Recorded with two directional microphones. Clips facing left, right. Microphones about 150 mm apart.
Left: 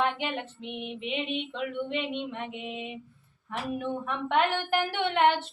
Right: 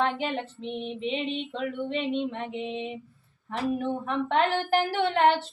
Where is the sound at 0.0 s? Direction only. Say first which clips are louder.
Right 2 dB; 35° right (ahead or behind).